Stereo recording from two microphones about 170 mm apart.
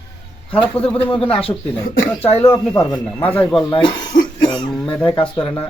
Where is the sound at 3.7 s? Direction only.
30° left (ahead or behind).